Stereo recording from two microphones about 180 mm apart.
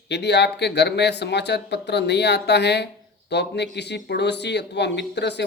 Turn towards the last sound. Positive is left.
turn(degrees=70)  # may be behind; listen again after turning